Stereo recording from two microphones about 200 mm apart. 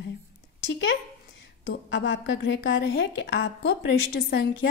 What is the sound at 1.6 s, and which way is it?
A woman's voice, 65° left (ahead or behind).